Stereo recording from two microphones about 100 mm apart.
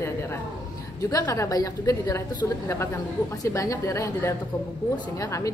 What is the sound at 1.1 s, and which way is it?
A woman's voice, 30° left (ahead or behind).